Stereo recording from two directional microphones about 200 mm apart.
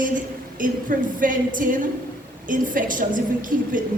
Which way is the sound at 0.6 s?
40° right (ahead or behind).